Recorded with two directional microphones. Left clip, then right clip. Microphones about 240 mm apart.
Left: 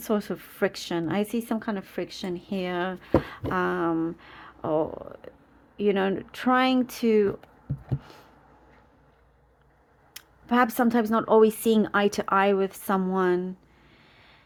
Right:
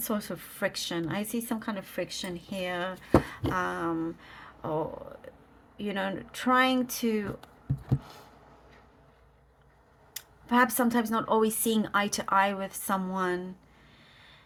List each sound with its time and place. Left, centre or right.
0.0 s speech: left
10.2 s speech: left